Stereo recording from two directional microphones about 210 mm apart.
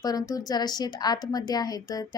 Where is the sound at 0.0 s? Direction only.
15° left (ahead or behind).